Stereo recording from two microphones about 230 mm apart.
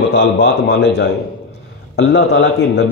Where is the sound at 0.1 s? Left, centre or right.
Left.